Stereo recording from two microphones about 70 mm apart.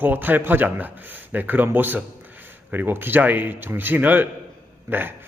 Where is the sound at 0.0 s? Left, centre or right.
Right.